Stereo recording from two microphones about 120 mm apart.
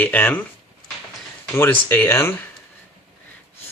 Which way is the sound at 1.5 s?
20° left (ahead or behind).